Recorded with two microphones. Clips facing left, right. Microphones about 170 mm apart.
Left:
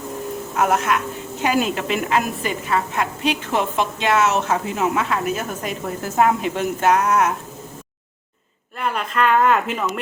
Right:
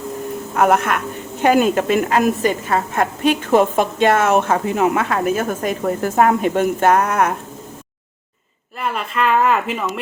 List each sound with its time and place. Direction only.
0.5 s a woman's voice: 55° right (ahead or behind)
8.8 s speech: centre (ahead or behind)